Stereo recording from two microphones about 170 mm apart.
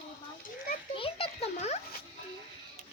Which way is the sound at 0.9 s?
35° left (ahead or behind).